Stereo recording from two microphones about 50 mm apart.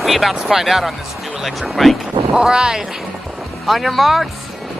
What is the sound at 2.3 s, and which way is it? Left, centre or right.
Speech, centre.